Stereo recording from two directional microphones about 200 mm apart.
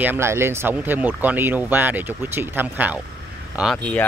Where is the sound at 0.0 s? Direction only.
10° right (ahead or behind).